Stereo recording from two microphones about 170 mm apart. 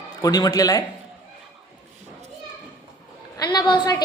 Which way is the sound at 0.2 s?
20° left (ahead or behind).